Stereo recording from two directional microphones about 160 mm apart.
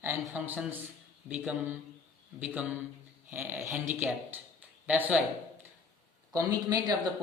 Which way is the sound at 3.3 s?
15° right (ahead or behind).